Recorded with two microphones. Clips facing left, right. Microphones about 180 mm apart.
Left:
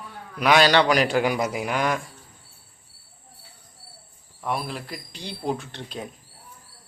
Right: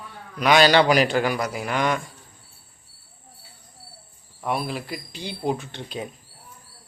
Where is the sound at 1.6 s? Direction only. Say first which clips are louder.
Right 4 dB; 5° left (ahead or behind).